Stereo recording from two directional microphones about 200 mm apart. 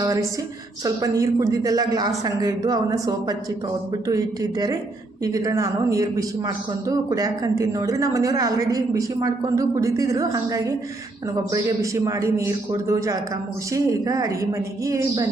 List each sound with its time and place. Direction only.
0.0 s a woman's voice: 15° right (ahead or behind)